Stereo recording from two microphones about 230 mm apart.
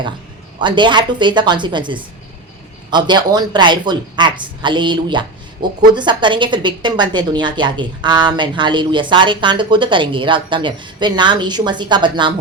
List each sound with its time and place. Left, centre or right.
0.6 s a woman's voice: centre